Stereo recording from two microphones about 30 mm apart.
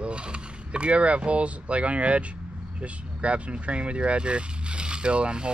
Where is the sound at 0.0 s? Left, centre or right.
Right.